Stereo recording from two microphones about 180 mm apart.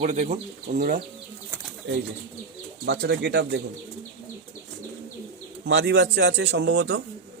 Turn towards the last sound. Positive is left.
turn(degrees=-75)  # may be behind; listen again after turning